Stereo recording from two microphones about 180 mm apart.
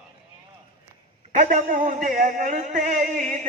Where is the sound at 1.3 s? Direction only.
45° right (ahead or behind).